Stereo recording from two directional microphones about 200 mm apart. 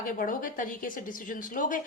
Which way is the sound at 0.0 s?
45° left (ahead or behind).